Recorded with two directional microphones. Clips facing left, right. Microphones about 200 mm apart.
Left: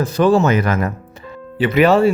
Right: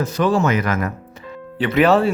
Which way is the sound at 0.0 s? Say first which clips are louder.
Left 4 dB; 30° left (ahead or behind).